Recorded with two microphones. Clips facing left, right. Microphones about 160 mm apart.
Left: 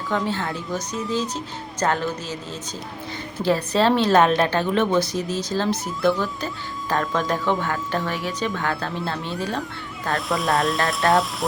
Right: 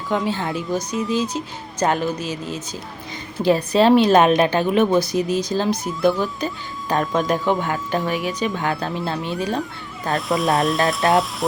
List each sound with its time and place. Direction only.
0.1 s a woman's voice: 15° right (ahead or behind)
10.2 s speech: centre (ahead or behind)